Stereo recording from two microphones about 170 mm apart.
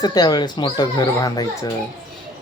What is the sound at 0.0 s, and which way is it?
Speech, 25° left (ahead or behind).